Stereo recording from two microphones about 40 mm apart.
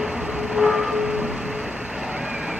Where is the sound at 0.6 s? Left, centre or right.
Centre.